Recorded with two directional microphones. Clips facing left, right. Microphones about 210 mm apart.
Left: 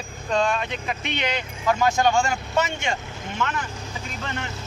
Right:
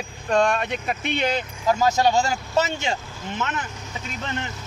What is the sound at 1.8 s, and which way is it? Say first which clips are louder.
Speech: right 1 dB; 30° right (ahead or behind).